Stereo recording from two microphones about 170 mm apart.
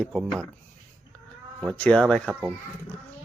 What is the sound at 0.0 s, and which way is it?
Speech, centre (ahead or behind).